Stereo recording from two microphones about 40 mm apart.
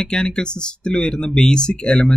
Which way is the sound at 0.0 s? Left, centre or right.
Left.